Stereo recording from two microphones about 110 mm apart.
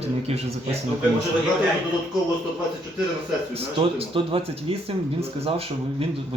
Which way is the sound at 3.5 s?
60° right (ahead or behind).